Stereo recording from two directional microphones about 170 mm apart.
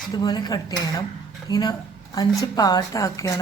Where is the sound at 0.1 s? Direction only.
25° left (ahead or behind).